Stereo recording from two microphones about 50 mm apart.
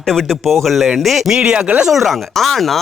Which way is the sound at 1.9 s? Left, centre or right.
Centre.